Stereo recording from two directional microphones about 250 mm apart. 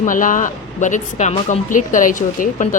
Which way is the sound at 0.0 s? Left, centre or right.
Left.